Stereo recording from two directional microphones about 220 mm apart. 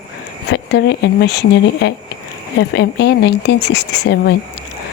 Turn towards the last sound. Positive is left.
turn(degrees=50)  # may be behind; listen again after turning